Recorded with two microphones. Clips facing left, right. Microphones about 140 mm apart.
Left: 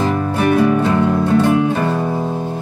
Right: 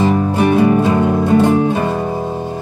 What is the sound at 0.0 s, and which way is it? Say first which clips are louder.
Music: right 3 dB; 15° right (ahead or behind).